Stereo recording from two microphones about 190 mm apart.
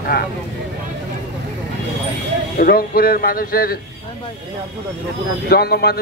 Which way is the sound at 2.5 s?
50° left (ahead or behind).